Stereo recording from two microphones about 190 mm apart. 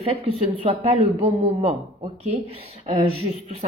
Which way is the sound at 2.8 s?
30° right (ahead or behind).